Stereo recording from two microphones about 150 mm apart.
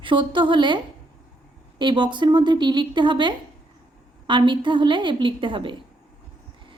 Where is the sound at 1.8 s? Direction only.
30° right (ahead or behind).